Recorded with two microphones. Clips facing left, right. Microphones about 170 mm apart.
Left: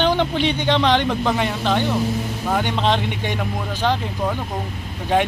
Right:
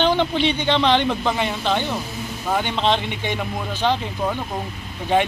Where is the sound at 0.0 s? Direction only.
10° left (ahead or behind).